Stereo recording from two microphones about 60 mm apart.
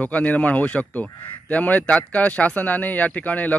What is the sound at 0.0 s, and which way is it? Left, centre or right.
Speech, left.